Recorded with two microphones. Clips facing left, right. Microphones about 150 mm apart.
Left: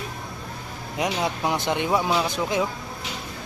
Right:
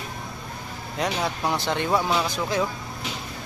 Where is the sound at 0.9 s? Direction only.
15° left (ahead or behind).